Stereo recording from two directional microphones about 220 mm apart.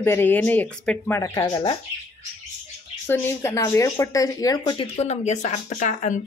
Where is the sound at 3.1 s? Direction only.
10° left (ahead or behind).